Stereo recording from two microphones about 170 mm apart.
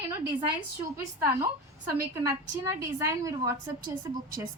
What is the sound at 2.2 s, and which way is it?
Speech, 20° right (ahead or behind).